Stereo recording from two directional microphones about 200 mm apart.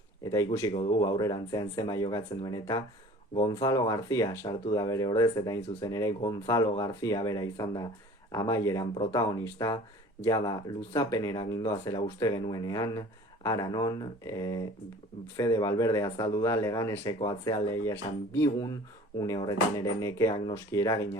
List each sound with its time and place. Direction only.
0.3 s speech: 15° left (ahead or behind)
0.7 s speech: 30° left (ahead or behind)
1.0 s speech: 20° left (ahead or behind)